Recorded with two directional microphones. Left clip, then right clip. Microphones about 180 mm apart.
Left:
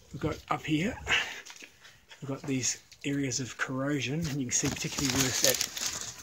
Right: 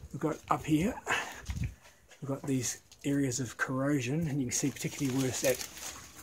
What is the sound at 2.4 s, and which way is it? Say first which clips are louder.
Speech: left 5 dB; centre (ahead or behind).